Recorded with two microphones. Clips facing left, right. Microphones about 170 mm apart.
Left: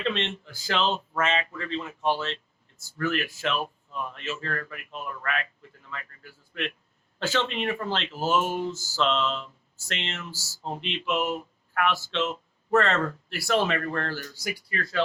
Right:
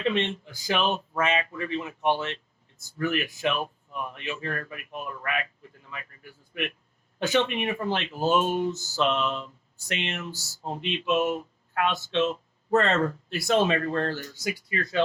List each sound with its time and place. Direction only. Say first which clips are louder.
0.0 s speech: right 3 dB; 15° right (ahead or behind)